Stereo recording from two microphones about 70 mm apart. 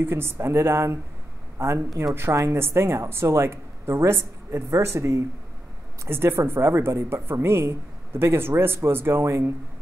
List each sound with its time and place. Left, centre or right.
0.0 s speech: right